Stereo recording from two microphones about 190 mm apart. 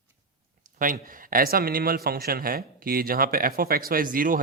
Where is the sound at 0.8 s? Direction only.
45° right (ahead or behind).